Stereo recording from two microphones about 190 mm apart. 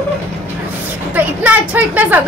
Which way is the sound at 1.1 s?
10° right (ahead or behind).